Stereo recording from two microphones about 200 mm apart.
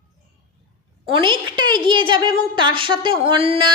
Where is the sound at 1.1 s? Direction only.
25° right (ahead or behind).